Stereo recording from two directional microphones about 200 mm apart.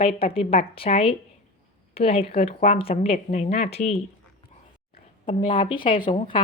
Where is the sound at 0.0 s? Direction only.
30° left (ahead or behind).